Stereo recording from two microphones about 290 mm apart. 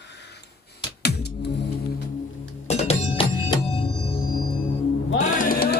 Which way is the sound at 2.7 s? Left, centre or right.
Centre.